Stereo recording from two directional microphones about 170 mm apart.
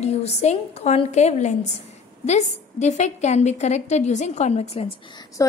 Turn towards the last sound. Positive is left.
turn(degrees=20)  # may be behind; listen again after turning